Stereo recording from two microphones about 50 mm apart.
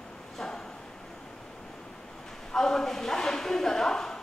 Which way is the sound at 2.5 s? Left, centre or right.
Centre.